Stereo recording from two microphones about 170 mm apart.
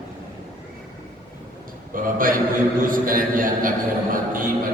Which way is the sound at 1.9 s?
55° right (ahead or behind).